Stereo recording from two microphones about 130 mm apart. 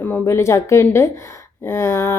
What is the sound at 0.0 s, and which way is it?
Speech, 15° left (ahead or behind).